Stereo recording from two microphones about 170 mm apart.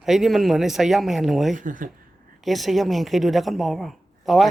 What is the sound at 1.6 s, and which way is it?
Speech, 50° right (ahead or behind).